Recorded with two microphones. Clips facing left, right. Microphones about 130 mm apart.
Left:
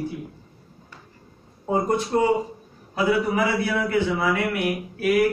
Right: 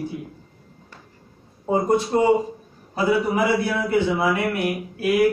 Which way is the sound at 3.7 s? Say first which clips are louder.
Right 2 dB; 15° right (ahead or behind).